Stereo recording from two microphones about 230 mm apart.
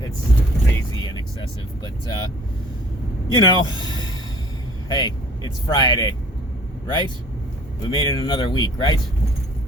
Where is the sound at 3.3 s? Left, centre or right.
Centre.